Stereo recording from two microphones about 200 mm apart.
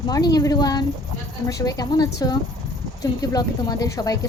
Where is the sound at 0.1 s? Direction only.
20° left (ahead or behind).